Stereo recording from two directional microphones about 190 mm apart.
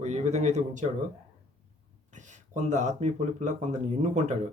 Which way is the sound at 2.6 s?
40° right (ahead or behind).